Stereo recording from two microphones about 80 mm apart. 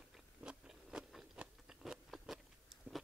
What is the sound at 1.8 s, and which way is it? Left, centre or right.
Biting, centre.